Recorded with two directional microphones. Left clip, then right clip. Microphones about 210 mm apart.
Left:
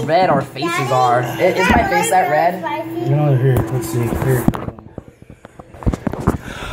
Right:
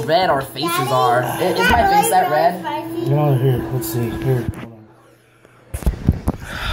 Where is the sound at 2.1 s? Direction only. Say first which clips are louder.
Left 1 dB; 5° right (ahead or behind).